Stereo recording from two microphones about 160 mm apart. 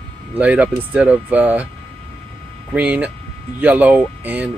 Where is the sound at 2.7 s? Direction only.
10° right (ahead or behind).